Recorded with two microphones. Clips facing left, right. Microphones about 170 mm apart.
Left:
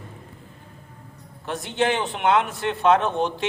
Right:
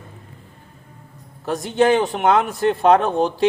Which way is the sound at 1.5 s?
40° right (ahead or behind).